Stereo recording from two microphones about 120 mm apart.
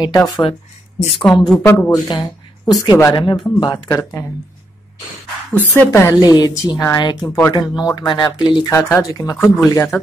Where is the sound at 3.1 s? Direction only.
40° left (ahead or behind).